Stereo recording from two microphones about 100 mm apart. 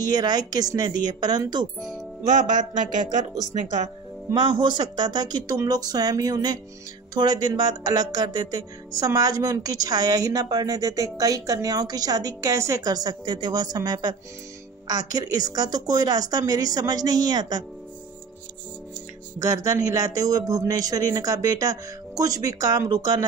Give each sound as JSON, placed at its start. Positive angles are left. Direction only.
{"t": 0.1, "sound": "a woman's voice", "side_deg": -40}
{"t": 4.3, "sound": "a woman's voice", "side_deg": -50}
{"t": 19.4, "sound": "a woman's voice", "side_deg": -35}